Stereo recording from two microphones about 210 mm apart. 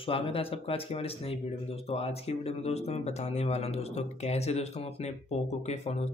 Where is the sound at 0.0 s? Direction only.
25° left (ahead or behind).